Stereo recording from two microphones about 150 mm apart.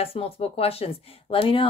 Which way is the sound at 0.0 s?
40° left (ahead or behind).